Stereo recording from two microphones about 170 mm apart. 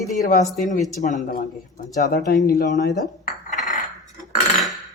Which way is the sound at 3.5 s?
45° left (ahead or behind).